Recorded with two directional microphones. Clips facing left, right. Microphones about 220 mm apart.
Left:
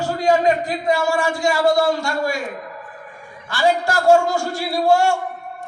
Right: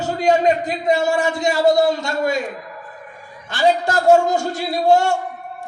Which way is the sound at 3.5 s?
20° right (ahead or behind).